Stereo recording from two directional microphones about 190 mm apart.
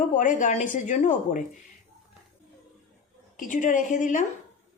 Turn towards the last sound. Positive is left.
turn(degrees=40)  # may be behind; listen again after turning